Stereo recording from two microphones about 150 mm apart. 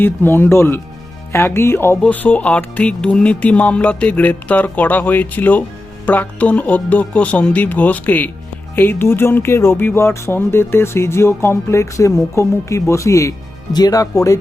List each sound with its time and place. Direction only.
0.0 s speech: 15° left (ahead or behind)